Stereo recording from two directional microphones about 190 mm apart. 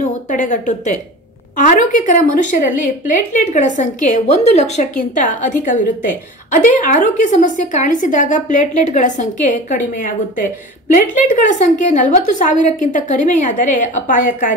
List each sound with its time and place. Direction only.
0.0 s a woman's voice: 45° left (ahead or behind)